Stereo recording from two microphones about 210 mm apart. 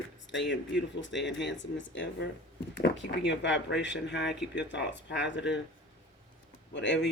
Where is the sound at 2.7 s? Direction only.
60° left (ahead or behind).